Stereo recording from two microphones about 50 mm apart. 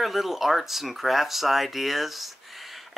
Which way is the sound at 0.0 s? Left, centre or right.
Centre.